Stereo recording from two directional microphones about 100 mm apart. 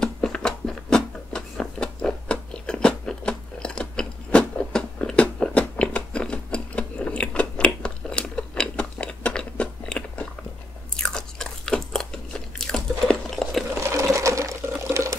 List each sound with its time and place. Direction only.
0.0 s a sound: 5° left (ahead or behind)
11.0 s crunch: 5° left (ahead or behind)
13.7 s sewing machine: 30° right (ahead or behind)
14.9 s water: 30° right (ahead or behind)